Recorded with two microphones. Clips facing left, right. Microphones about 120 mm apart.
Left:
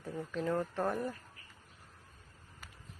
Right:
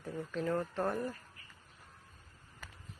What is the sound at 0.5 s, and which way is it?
Speech, 15° left (ahead or behind).